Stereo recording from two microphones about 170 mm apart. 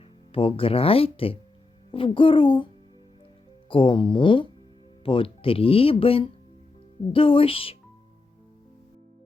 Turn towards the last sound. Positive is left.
turn(degrees=35)  # may be behind; listen again after turning